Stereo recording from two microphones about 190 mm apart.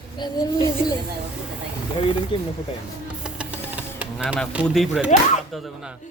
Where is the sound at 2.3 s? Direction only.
25° left (ahead or behind).